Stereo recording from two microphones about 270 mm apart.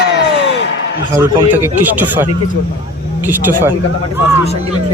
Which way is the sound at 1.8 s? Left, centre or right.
Centre.